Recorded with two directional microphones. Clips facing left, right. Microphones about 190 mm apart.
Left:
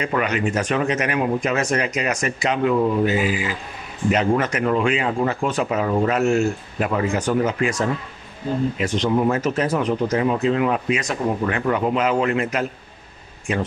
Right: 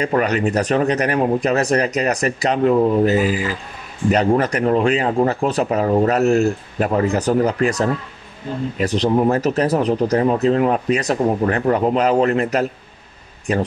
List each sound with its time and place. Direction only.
0.0 s speech: 35° right (ahead or behind)